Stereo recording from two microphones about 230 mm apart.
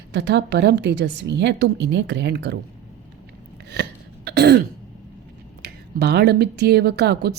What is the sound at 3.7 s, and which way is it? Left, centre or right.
Throat clearing, right.